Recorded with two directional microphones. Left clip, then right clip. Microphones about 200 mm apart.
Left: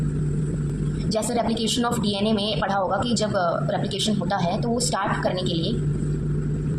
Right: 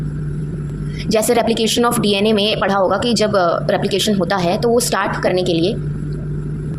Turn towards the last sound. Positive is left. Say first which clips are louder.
# right 9 dB
turn(degrees=-45)  # may be behind; listen again after turning